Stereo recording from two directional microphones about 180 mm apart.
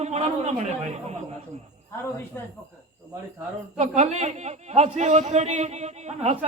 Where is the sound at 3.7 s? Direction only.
40° right (ahead or behind).